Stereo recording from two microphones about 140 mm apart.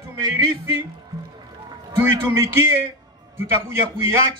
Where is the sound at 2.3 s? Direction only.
20° right (ahead or behind).